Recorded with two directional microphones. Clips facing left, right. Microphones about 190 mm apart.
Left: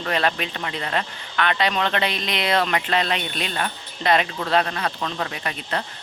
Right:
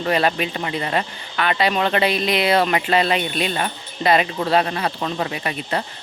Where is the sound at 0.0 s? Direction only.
10° right (ahead or behind).